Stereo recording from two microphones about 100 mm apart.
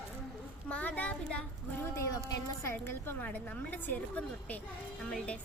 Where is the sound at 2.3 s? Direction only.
30° left (ahead or behind).